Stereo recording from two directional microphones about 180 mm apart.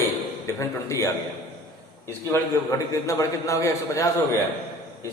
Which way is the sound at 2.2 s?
15° left (ahead or behind).